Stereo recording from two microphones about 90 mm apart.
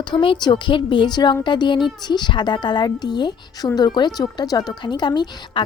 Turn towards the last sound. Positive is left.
turn(degrees=55)  # may be behind; listen again after turning